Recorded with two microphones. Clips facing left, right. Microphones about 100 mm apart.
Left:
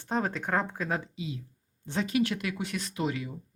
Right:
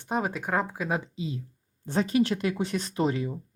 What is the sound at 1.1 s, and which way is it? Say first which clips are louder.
Speech: right 4 dB; 35° right (ahead or behind).